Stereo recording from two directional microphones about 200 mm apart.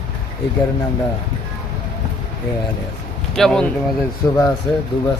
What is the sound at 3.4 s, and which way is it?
Speech, 5° left (ahead or behind).